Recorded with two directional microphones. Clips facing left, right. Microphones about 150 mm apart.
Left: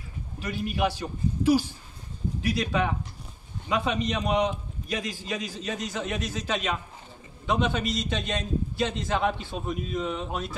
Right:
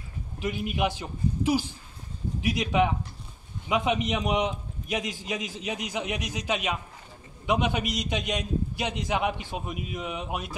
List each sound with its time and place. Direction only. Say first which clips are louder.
0.4 s a man's voice: even; 20° right (ahead or behind)